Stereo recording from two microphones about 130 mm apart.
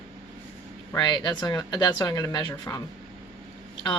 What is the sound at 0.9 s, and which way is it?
Speech, 35° left (ahead or behind).